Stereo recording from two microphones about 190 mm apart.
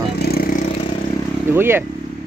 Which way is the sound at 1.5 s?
10° right (ahead or behind).